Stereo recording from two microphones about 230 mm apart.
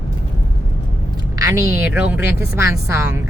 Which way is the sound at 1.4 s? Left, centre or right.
Centre.